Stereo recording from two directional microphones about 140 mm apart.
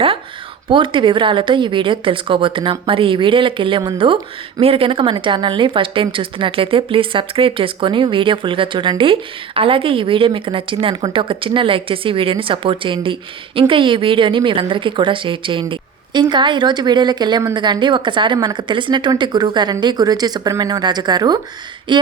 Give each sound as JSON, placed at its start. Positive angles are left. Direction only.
{"t": 0.7, "sound": "speech", "side_deg": -35}